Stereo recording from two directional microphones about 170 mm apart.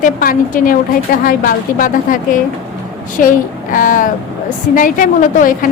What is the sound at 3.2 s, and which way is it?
A woman's voice, 55° left (ahead or behind).